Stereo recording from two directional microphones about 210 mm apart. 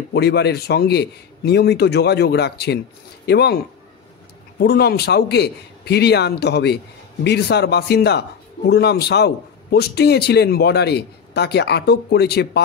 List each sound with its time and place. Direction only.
0.1 s a man's voice: 55° left (ahead or behind)
4.6 s a man's voice: 50° left (ahead or behind)